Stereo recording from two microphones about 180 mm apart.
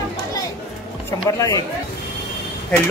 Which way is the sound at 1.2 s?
20° left (ahead or behind).